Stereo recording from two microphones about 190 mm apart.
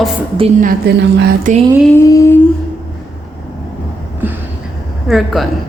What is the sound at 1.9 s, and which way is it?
Speech, 15° left (ahead or behind).